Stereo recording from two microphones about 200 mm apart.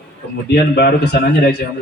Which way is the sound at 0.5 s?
50° left (ahead or behind).